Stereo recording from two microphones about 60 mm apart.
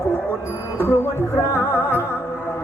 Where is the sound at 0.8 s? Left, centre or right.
Left.